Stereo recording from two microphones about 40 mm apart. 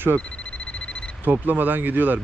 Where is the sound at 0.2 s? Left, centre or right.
Left.